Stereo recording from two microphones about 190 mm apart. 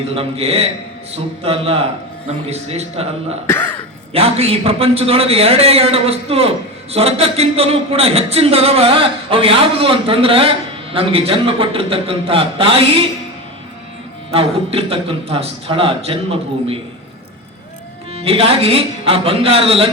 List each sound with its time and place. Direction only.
0.1 s a man's voice: 30° right (ahead or behind)
14.3 s a man's voice: 30° right (ahead or behind)
18.2 s a man's voice: 30° right (ahead or behind)